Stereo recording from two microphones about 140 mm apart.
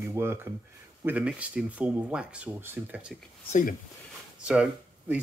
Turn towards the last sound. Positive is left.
turn(degrees=-10)  # may be behind; listen again after turning